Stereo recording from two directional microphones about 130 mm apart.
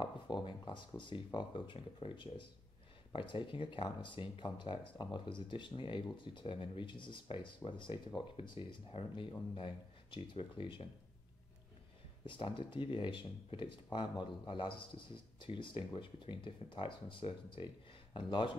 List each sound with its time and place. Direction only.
0.0 s speech: 40° left (ahead or behind)
12.3 s speech: 40° left (ahead or behind)